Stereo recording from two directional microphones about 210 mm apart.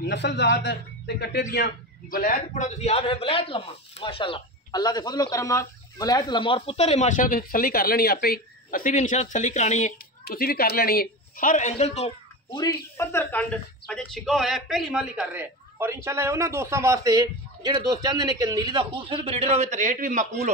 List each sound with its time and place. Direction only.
0.1 s a man's voice: 55° left (ahead or behind); by 9.9 s 35° left (ahead or behind)
10.2 s speech: 45° left (ahead or behind)
12.5 s a woman's voice: 15° left (ahead or behind); by 20.5 s 35° right (ahead or behind)